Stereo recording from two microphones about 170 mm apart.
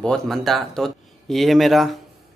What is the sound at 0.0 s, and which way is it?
Speech, 5° left (ahead or behind).